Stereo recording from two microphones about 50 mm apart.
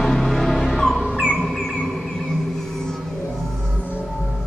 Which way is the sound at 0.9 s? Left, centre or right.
Centre.